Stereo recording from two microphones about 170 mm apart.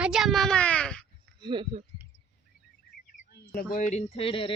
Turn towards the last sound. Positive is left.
turn(degrees=30)  # may be behind; listen again after turning